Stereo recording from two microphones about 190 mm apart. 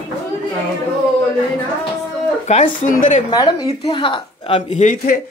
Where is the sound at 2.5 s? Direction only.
40° left (ahead or behind).